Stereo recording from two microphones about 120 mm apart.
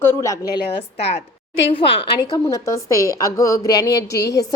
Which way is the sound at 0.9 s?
60° left (ahead or behind).